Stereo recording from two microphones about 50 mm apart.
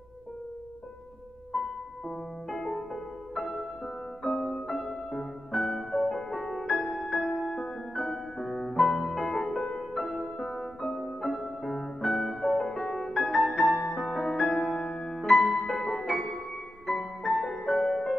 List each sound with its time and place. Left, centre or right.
2.0 s music: centre
14.8 s music: centre
15.1 s music: centre